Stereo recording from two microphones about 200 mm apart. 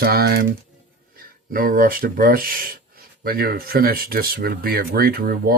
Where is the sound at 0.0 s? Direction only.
50° right (ahead or behind).